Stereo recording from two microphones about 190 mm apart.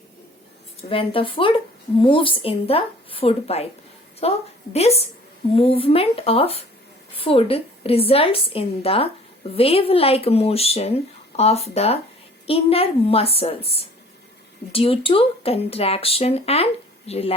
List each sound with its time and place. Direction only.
0.9 s a woman's voice: 30° left (ahead or behind)